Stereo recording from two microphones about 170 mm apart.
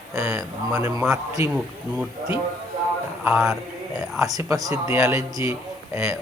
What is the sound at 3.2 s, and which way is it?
Speech, 5° right (ahead or behind).